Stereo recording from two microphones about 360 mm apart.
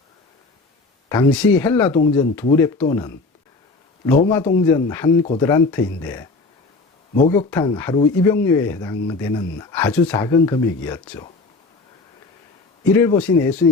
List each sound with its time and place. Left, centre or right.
1.1 s speech: centre
4.3 s speech: centre
5.2 s speech: centre
7.3 s speech: centre
12.9 s speech: centre